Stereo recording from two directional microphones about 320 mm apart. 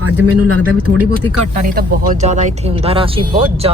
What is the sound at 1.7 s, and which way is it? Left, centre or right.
Speech, right.